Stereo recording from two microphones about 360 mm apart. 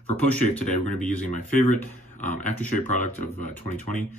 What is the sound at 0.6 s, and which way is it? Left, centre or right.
Speech, left.